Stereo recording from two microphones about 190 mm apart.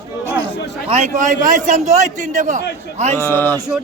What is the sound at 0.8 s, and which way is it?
A man's voice, 40° right (ahead or behind).